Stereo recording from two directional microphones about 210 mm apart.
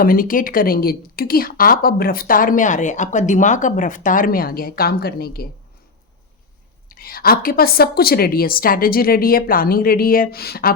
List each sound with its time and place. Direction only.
0.0 s a woman's voice: 40° left (ahead or behind)
6.8 s a woman's voice: 45° left (ahead or behind)